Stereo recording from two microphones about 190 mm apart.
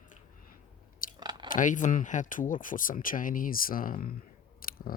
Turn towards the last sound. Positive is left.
turn(degrees=50)  # may be behind; listen again after turning